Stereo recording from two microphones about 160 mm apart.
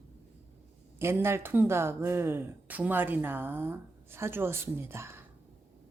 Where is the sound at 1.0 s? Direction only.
15° right (ahead or behind).